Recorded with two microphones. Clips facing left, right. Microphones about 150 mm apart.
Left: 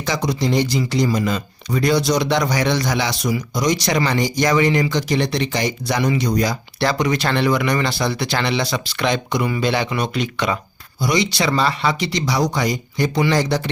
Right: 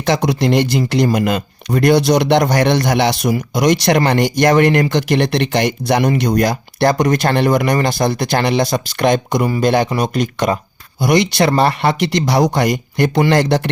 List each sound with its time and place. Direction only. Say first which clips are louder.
0.0 s speech: right 5 dB; 60° right (ahead or behind); by 10.6 s 45° right (ahead or behind)
11.0 s speech: right 6 dB; 55° right (ahead or behind)